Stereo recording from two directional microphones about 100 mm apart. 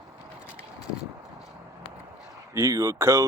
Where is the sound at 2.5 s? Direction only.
30° right (ahead or behind).